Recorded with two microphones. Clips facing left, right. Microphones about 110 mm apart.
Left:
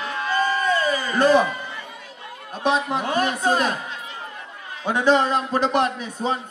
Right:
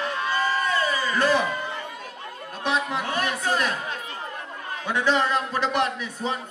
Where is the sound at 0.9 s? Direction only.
30° left (ahead or behind).